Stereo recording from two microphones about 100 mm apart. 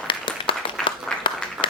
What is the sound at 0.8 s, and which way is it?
Applause, 10° left (ahead or behind).